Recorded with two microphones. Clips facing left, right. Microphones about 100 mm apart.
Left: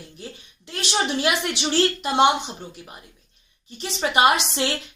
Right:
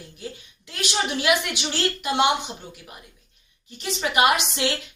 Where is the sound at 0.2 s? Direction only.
30° left (ahead or behind).